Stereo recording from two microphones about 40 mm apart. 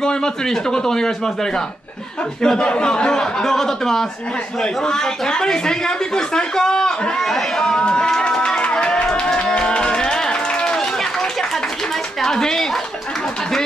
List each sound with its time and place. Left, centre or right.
0.0 s speech: centre
8.7 s music: centre
11.0 s run: centre
12.2 s speech: centre